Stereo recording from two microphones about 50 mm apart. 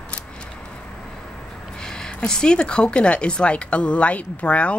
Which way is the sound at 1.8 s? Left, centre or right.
Centre.